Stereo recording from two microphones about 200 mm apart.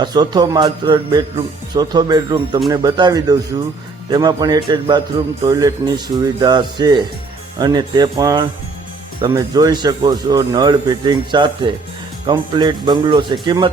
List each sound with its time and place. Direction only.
0.0 s a man's voice: 20° right (ahead or behind)